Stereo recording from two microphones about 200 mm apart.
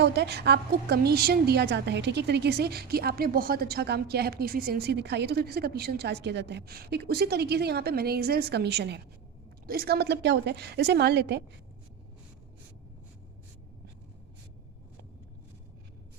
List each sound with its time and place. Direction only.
0.0 s a woman's voice: 55° right (ahead or behind)